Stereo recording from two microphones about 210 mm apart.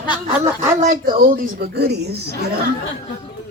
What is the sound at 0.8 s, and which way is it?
A woman's voice, 40° right (ahead or behind).